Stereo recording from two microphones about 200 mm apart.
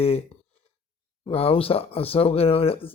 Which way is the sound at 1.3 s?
30° left (ahead or behind).